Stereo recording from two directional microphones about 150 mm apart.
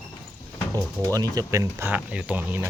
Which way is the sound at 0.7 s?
20° right (ahead or behind).